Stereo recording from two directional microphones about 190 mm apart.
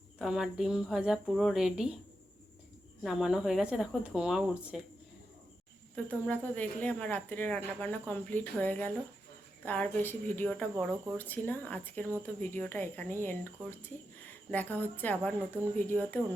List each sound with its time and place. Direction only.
0.2 s speech: centre (ahead or behind)
3.0 s speech: centre (ahead or behind)
6.1 s a woman's voice: 10° left (ahead or behind)